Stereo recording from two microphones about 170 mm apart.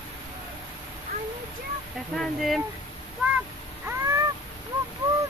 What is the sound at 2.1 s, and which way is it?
Speech, centre (ahead or behind).